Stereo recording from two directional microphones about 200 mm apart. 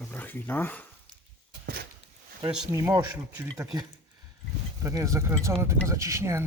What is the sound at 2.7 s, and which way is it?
Speech, 15° right (ahead or behind).